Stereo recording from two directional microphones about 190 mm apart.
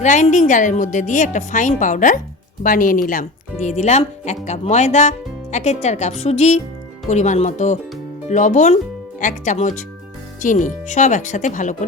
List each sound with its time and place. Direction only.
0.0 s a woman's voice: 40° left (ahead or behind)